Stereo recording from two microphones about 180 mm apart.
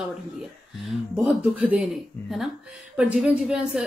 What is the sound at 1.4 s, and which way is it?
A woman's voice, 10° right (ahead or behind).